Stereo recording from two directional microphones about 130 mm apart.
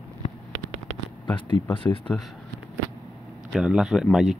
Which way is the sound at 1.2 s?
40° left (ahead or behind).